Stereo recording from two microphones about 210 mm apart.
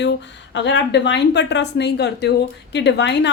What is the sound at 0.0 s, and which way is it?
A woman's voice, 60° left (ahead or behind).